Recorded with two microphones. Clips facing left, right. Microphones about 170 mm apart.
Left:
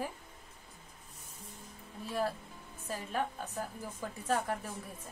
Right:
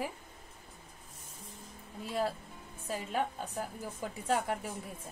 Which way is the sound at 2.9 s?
15° right (ahead or behind).